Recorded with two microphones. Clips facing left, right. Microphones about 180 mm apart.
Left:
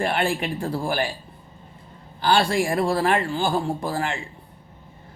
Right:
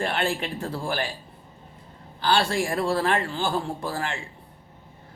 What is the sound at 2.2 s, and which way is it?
Speech, 15° left (ahead or behind).